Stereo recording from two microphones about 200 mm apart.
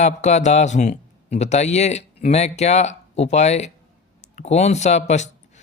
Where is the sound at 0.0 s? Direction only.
35° left (ahead or behind).